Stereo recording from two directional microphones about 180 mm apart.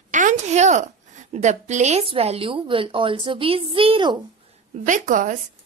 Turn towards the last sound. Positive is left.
turn(degrees=-45)  # may be behind; listen again after turning